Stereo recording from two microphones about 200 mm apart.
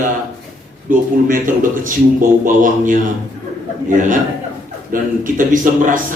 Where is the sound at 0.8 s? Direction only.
40° right (ahead or behind).